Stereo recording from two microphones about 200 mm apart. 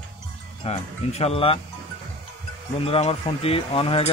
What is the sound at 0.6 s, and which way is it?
Speech, 30° left (ahead or behind).